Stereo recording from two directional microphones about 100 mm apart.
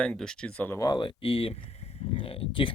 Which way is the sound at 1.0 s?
65° left (ahead or behind).